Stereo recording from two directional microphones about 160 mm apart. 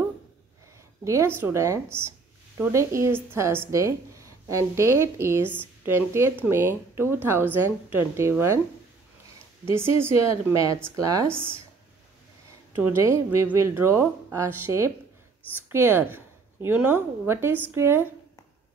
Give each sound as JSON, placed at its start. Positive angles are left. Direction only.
{"t": 1.0, "sound": "a woman's voice", "side_deg": -15}
{"t": 9.7, "sound": "a woman's voice", "side_deg": -15}
{"t": 12.7, "sound": "a woman's voice", "side_deg": -15}